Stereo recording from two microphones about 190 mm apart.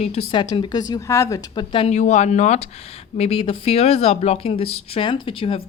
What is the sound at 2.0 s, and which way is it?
Speech, 35° left (ahead or behind).